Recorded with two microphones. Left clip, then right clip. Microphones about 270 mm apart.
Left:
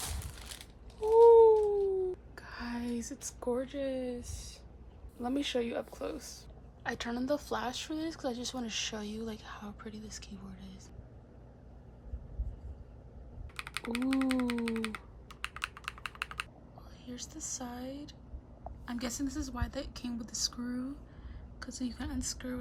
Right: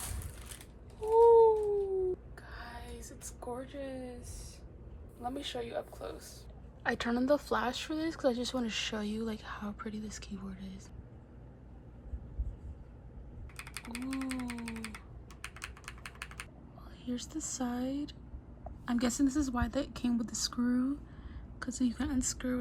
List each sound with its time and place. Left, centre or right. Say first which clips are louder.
0.6 s a sound: left 4 dB; left
2.3 s a sound: left 5 dB; left
5.2 s a woman's voice: left 5 dB; left
6.8 s speech: right 4 dB; centre
13.6 s typing: left 7 dB; centre
17.1 s a woman's voice: right 3 dB; centre